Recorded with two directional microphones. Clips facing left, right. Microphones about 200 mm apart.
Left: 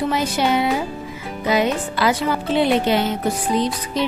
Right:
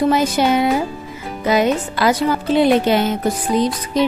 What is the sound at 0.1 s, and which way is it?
Speech, 45° right (ahead or behind).